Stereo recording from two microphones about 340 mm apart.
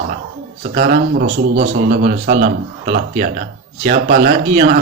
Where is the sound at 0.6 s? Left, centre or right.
Right.